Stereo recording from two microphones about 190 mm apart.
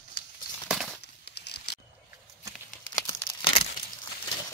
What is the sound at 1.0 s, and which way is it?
Crumpling, 60° left (ahead or behind).